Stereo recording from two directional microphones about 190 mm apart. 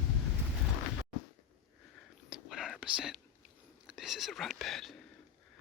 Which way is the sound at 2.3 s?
Centre (ahead or behind).